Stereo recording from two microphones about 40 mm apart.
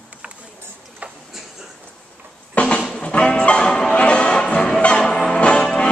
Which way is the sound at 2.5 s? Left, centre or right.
Left.